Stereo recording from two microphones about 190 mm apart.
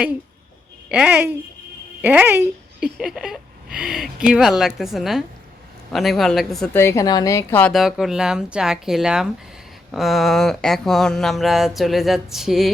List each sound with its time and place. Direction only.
0.9 s speech: 5° right (ahead or behind)
6.7 s a woman's voice: 15° left (ahead or behind)
7.7 s speech: centre (ahead or behind)